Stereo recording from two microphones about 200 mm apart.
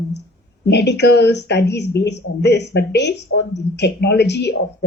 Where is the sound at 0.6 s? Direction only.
55° left (ahead or behind).